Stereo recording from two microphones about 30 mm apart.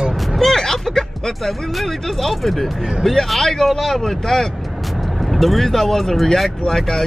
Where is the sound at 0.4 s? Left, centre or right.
Centre.